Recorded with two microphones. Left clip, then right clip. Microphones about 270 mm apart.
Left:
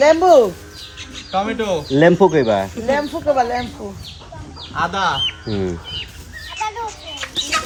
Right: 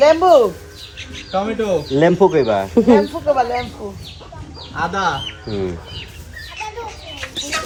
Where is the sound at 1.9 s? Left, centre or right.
Left.